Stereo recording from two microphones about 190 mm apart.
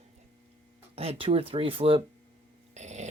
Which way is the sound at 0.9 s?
30° right (ahead or behind).